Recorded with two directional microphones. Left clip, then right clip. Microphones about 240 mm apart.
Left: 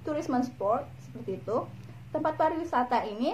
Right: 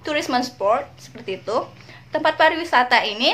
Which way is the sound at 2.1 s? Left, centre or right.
Right.